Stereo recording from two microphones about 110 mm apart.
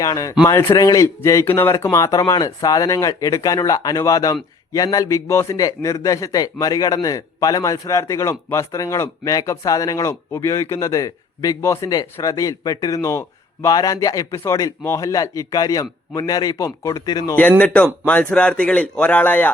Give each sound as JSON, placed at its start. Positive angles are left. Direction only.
{"t": 0.0, "sound": "a man's voice", "side_deg": 30}
{"t": 17.6, "sound": "a man's voice", "side_deg": 10}